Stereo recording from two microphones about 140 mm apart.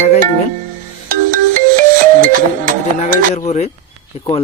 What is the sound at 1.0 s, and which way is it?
Music, 75° right (ahead or behind).